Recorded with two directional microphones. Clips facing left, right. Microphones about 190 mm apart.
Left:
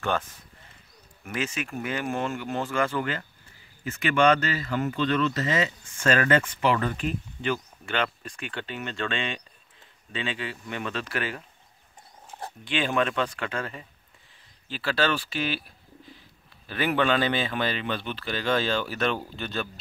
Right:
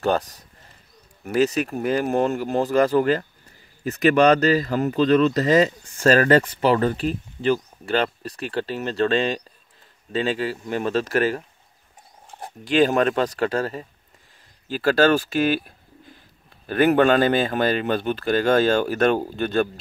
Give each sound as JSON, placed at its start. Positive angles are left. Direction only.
{"t": 0.0, "sound": "speech", "side_deg": -40}
{"t": 12.6, "sound": "speech", "side_deg": -40}